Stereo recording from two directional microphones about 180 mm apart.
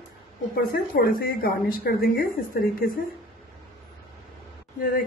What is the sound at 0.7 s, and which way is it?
A woman's voice, 55° left (ahead or behind).